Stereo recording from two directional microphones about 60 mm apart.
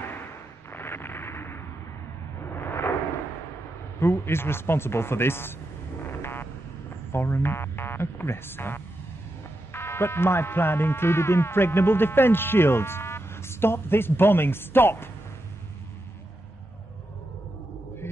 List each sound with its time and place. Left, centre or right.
0.7 s a sound: left
4.0 s speech: left
7.1 s speech: left